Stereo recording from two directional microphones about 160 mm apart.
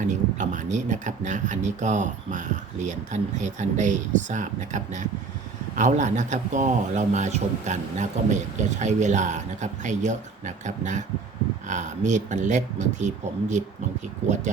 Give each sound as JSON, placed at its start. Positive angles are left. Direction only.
{"t": 0.0, "sound": "a man's voice", "side_deg": -50}